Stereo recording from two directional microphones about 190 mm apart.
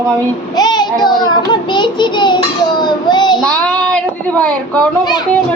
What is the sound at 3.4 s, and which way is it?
Child singing, 5° left (ahead or behind).